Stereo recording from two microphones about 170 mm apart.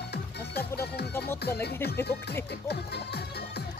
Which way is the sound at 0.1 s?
70° left (ahead or behind).